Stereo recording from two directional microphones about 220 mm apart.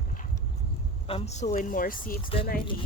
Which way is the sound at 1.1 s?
30° left (ahead or behind).